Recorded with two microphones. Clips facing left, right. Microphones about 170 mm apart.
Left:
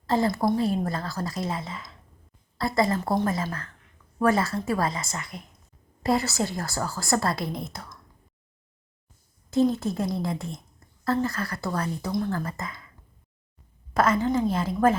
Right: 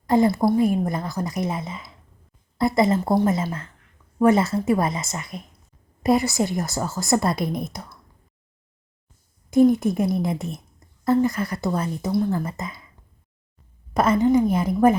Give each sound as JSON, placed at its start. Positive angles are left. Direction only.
{"t": 0.1, "sound": "a woman's voice", "side_deg": -15}
{"t": 9.5, "sound": "a woman's voice", "side_deg": -15}
{"t": 13.9, "sound": "a woman's voice", "side_deg": -20}